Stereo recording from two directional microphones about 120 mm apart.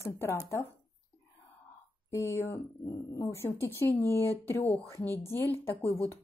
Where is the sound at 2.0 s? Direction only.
25° left (ahead or behind).